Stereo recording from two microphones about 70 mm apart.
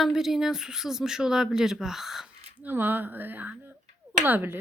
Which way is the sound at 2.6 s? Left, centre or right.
Right.